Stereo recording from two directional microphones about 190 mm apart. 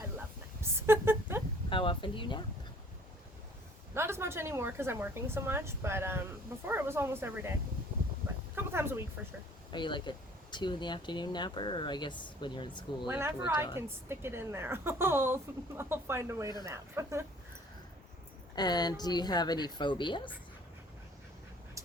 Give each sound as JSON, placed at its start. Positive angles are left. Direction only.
{"t": 0.6, "sound": "a sound", "side_deg": -15}
{"t": 1.7, "sound": "speech", "side_deg": 25}
{"t": 3.9, "sound": "a woman's voice", "side_deg": -15}
{"t": 8.5, "sound": "speech", "side_deg": -10}
{"t": 9.7, "sound": "speech", "side_deg": 25}
{"t": 13.1, "sound": "a woman's voice", "side_deg": -10}
{"t": 18.5, "sound": "speech", "side_deg": 20}